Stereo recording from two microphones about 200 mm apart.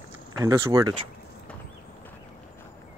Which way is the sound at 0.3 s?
15° right (ahead or behind).